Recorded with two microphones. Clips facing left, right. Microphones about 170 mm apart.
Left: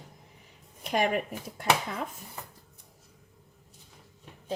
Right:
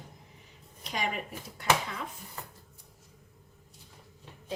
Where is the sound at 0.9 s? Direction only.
55° left (ahead or behind).